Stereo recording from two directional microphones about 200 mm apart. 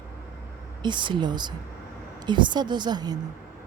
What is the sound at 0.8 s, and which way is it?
A woman's voice, 25° right (ahead or behind).